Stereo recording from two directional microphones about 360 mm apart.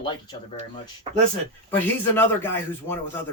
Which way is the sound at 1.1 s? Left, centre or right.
Centre.